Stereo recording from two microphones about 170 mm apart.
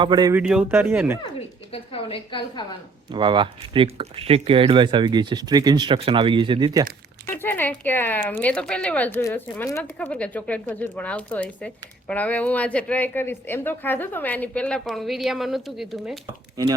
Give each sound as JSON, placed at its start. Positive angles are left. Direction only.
{"t": 0.0, "sound": "speech", "side_deg": -25}
{"t": 0.3, "sound": "speech", "side_deg": -5}
{"t": 1.2, "sound": "a woman's voice", "side_deg": 35}
{"t": 3.1, "sound": "speech", "side_deg": -30}
{"t": 7.3, "sound": "speech", "side_deg": 10}
{"t": 16.6, "sound": "speech", "side_deg": -20}